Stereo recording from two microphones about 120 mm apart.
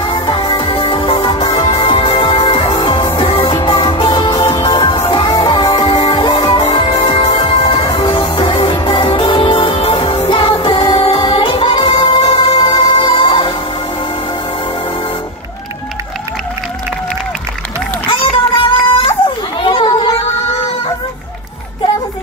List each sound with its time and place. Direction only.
0.0 s music: 40° left (ahead or behind)
5.4 s music: 35° left (ahead or behind)
18.0 s a sound: 45° left (ahead or behind)